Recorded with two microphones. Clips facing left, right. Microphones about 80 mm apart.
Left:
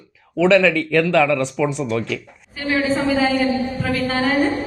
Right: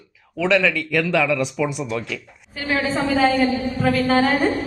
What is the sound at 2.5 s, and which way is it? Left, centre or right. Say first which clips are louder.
A woman's voice: left 2 dB; centre.